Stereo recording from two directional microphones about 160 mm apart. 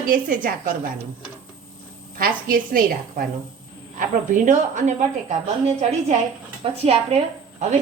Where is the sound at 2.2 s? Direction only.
60° right (ahead or behind).